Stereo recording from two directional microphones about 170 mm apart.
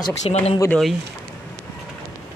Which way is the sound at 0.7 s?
Centre (ahead or behind).